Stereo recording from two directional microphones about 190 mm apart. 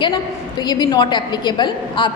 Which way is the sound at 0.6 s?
20° left (ahead or behind).